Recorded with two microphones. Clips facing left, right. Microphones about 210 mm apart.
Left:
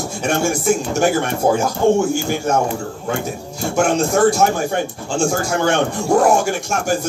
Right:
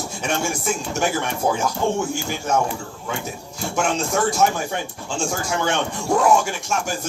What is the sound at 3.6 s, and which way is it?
Speech, 45° left (ahead or behind).